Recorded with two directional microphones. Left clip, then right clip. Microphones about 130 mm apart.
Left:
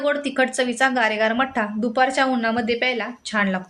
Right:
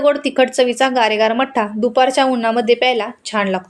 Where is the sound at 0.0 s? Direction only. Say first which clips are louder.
Right 7 dB; 35° right (ahead or behind).